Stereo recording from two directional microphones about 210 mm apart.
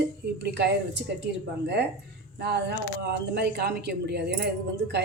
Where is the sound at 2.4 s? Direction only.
50° right (ahead or behind).